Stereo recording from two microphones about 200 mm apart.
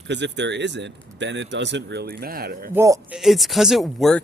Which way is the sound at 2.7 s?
15° right (ahead or behind).